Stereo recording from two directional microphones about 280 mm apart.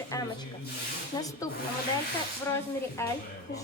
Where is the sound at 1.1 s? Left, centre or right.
Centre.